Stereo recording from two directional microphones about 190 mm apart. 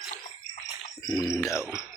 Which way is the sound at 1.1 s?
15° left (ahead or behind).